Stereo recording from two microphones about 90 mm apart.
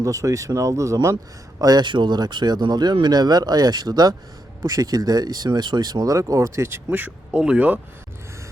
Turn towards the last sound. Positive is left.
turn(degrees=-15)  # may be behind; listen again after turning